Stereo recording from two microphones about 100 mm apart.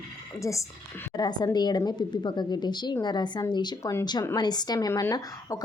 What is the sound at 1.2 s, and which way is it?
A woman's voice, 45° left (ahead or behind).